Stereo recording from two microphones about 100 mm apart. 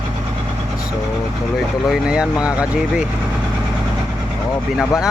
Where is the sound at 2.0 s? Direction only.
10° right (ahead or behind).